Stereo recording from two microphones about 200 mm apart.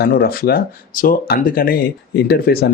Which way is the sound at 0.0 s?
50° left (ahead or behind).